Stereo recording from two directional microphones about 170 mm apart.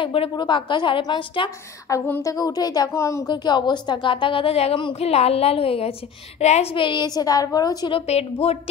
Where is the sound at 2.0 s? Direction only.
20° left (ahead or behind).